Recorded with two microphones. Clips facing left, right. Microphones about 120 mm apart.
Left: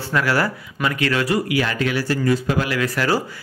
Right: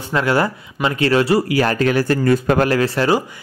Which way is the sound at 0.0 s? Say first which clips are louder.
Right 3 dB; 25° right (ahead or behind).